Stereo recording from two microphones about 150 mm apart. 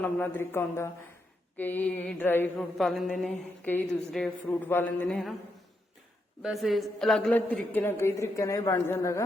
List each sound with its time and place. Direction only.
0.0 s a man's voice: 15° left (ahead or behind)
2.6 s a woman's voice: centre (ahead or behind)
6.4 s a woman's voice: centre (ahead or behind)
7.3 s a man's voice: 10° left (ahead or behind)